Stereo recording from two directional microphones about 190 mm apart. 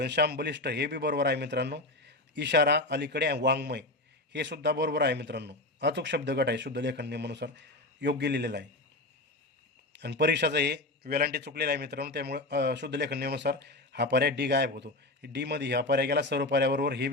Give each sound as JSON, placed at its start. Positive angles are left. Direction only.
{"t": 0.0, "sound": "a man's voice", "side_deg": -55}
{"t": 9.9, "sound": "a man's voice", "side_deg": -60}